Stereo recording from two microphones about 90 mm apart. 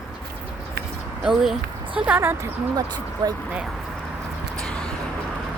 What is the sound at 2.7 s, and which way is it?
Speech, 50° right (ahead or behind).